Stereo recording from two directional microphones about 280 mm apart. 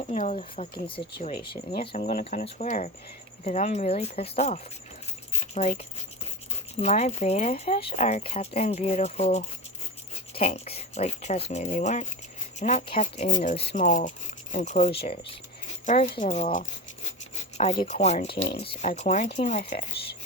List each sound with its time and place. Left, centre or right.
0.1 s speech: left
5.3 s keys jangling: left
6.7 s speech: left
18.3 s speech: left
18.6 s speech: left